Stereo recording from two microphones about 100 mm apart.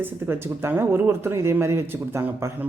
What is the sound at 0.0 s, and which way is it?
Speech, 25° right (ahead or behind).